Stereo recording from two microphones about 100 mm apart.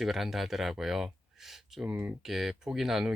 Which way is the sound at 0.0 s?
Centre (ahead or behind).